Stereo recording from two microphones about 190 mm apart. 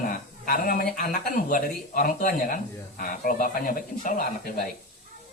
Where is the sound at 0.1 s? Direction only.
50° left (ahead or behind).